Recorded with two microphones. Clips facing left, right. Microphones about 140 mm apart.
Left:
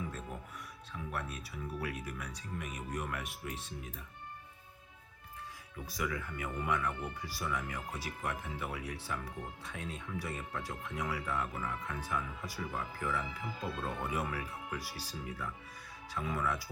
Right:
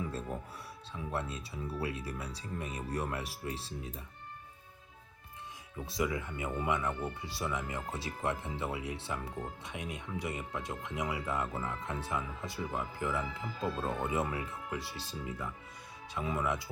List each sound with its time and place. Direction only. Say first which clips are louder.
0.9 s speech: right 3 dB; 25° right (ahead or behind)
5.8 s speech: right 4 dB; 25° right (ahead or behind)